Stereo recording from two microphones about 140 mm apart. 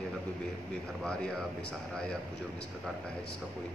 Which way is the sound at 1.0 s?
5° left (ahead or behind).